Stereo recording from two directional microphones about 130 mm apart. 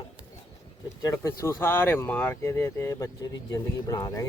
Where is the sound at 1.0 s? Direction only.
20° left (ahead or behind).